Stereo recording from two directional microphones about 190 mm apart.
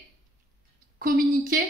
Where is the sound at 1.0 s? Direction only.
45° right (ahead or behind).